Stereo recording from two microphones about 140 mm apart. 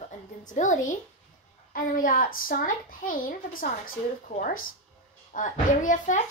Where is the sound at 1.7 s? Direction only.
80° left.